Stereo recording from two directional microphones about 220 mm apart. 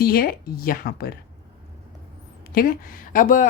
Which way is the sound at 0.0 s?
40° left (ahead or behind).